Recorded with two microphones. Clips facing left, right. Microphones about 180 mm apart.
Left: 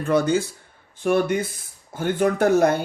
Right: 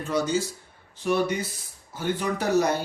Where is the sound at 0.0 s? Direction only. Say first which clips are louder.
Left 5 dB; 55° left (ahead or behind).